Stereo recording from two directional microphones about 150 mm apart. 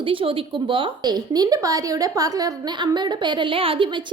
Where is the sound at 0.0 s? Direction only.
35° right (ahead or behind).